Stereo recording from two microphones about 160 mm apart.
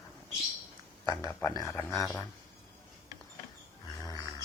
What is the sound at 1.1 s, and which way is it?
Speech, 20° left (ahead or behind).